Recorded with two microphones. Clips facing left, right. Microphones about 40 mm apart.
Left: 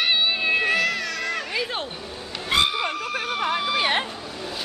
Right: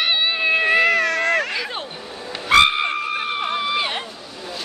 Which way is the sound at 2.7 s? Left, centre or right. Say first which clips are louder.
Right 4 dB; right.